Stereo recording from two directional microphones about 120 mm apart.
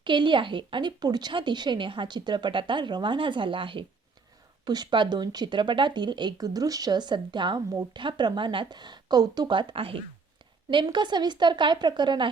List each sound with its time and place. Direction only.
0.0 s speech: 40° right (ahead or behind)